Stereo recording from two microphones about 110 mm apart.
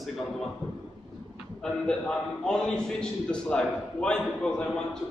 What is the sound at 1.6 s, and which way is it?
A man's voice, 5° left (ahead or behind).